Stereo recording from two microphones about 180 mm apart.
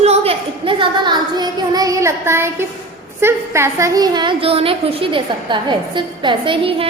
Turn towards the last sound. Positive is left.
turn(degrees=-30)  # may be behind; listen again after turning